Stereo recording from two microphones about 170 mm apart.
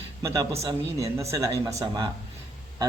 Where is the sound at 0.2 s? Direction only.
20° right (ahead or behind).